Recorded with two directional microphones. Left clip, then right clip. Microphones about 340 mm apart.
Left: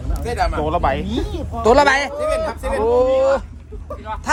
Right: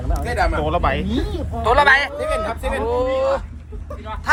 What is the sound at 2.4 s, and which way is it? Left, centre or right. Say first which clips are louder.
Speech: left 1 dB; centre.